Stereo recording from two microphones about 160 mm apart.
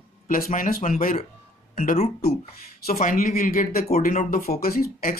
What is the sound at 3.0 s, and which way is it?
Speech, 55° left (ahead or behind).